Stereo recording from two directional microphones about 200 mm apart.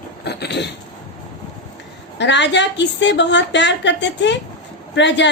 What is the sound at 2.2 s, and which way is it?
A woman's voice, 60° left (ahead or behind).